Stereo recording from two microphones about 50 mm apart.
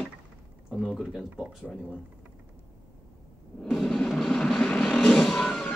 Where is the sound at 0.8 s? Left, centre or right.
Centre.